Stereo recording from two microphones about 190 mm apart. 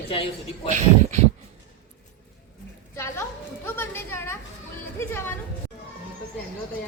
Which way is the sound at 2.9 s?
15° left (ahead or behind).